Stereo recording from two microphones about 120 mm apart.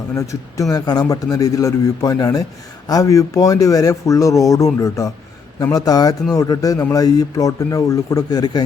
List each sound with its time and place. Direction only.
0.2 s a man's voice: 25° left (ahead or behind)